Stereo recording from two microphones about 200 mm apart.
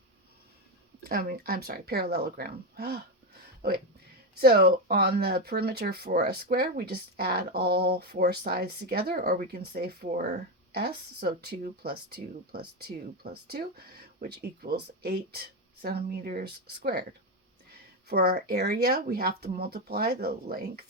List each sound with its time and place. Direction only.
1.0 s speech: 50° right (ahead or behind)
4.4 s speech: 50° right (ahead or behind)
18.1 s speech: 50° right (ahead or behind)